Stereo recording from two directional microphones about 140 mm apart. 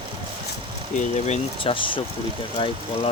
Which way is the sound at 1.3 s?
40° left (ahead or behind).